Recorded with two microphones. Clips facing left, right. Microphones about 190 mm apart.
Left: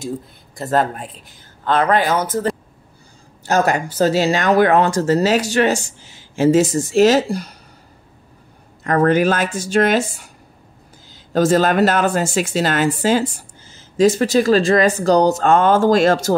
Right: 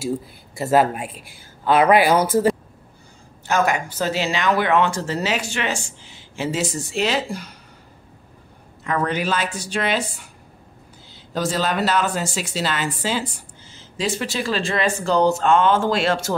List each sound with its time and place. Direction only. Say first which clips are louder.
0.6 s speech: right 1 dB; 10° right (ahead or behind)
3.4 s speech: left 3 dB; 40° left (ahead or behind)
8.8 s a woman's voice: left 8 dB; 45° left (ahead or behind)
11.3 s a woman's voice: left 8 dB; 50° left (ahead or behind)